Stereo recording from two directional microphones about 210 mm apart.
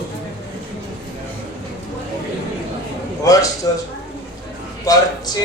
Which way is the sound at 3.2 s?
15° left (ahead or behind).